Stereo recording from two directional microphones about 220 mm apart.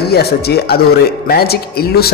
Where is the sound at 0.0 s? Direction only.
45° left (ahead or behind).